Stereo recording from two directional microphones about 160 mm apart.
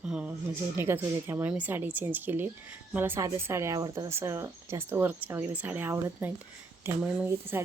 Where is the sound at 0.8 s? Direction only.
15° right (ahead or behind).